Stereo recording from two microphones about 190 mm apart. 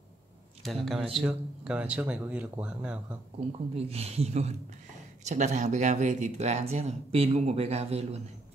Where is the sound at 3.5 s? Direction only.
35° right (ahead or behind).